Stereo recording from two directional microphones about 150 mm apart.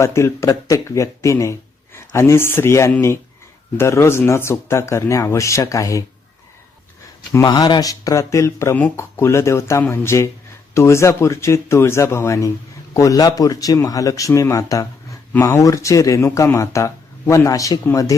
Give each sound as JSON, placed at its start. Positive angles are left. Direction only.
{"t": 0.0, "sound": "speech", "side_deg": 20}
{"t": 7.4, "sound": "speech", "side_deg": 25}